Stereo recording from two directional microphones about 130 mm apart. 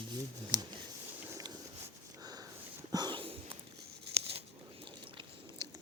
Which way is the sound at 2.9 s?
35° right (ahead or behind).